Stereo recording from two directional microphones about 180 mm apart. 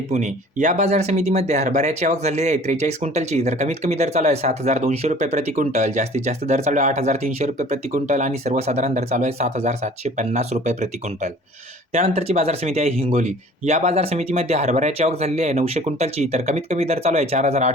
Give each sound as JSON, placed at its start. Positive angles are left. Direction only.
{"t": 0.1, "sound": "speech", "side_deg": -45}